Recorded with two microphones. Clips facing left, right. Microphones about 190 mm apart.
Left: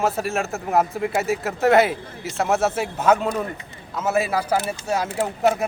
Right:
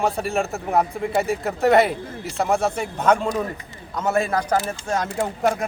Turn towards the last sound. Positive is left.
turn(degrees=5)  # may be behind; listen again after turning